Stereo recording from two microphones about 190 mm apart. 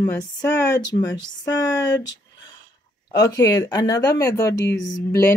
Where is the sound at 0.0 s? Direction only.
10° left (ahead or behind).